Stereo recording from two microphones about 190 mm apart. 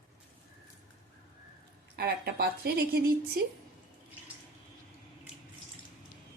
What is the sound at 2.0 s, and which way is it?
A woman's voice, 55° right (ahead or behind).